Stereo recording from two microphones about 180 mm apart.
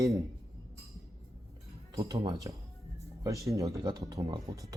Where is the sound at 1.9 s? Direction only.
20° right (ahead or behind).